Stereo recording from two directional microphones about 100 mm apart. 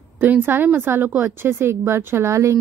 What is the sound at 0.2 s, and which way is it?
A woman's voice, 20° right (ahead or behind).